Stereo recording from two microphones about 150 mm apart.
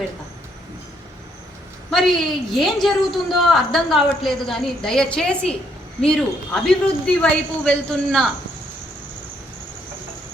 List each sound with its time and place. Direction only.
1.9 s a woman's voice: centre (ahead or behind)